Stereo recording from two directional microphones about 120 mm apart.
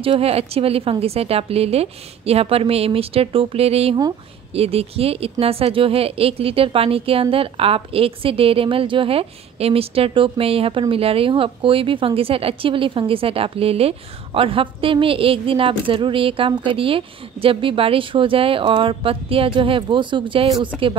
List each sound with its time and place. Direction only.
0.0 s a woman's voice: 55° right (ahead or behind)